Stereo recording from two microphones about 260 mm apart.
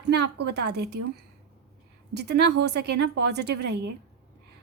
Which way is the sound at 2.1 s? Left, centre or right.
Right.